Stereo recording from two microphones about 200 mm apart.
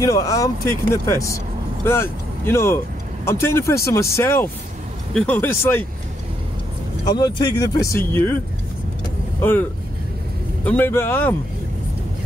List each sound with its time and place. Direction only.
0.0 s speech: 15° left (ahead or behind)
7.1 s speech: 20° left (ahead or behind)
10.6 s speech: 10° left (ahead or behind)